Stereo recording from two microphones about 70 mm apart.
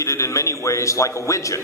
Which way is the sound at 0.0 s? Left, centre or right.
Left.